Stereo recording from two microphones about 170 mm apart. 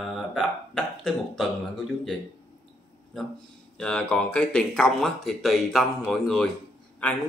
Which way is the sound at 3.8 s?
5° left (ahead or behind).